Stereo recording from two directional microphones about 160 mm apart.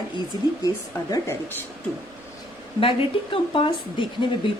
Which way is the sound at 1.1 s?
20° left (ahead or behind).